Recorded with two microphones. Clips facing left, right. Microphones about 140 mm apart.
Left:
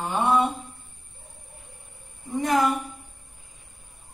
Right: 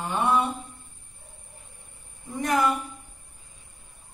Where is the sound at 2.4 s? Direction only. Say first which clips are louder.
Left 1 dB; 20° left (ahead or behind).